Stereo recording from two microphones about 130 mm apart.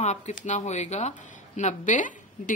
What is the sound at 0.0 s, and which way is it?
Speech, 60° left (ahead or behind).